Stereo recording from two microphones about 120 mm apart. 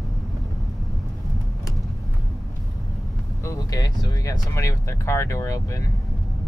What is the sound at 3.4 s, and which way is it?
Speech, 30° left (ahead or behind).